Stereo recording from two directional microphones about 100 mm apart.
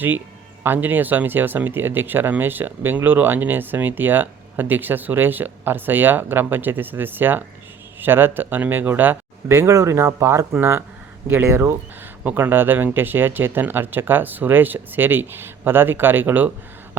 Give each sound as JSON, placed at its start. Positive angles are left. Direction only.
{"t": 0.6, "sound": "speech", "side_deg": -20}
{"t": 9.5, "sound": "speech", "side_deg": -30}